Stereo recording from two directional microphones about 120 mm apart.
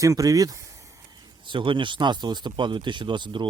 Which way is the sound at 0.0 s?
25° right (ahead or behind).